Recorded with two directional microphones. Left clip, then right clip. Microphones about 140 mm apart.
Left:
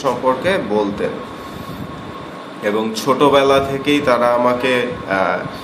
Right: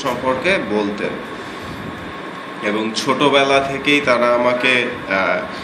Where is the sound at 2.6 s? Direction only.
55° left (ahead or behind).